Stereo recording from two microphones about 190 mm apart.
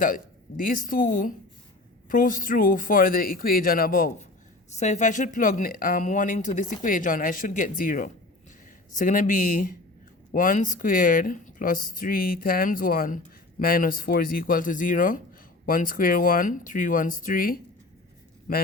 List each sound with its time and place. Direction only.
0.0 s speech: 45° left (ahead or behind)